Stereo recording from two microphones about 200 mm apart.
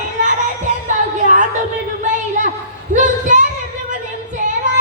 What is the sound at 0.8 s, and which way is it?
Music, 40° right (ahead or behind).